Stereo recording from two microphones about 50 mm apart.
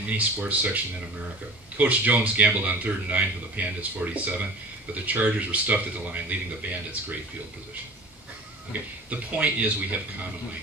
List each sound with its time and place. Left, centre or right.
0.2 s a man's voice: right
1.8 s a man's voice: right
8.7 s a man's voice: right